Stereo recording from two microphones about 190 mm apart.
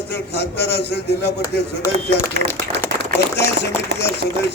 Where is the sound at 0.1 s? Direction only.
60° left (ahead or behind).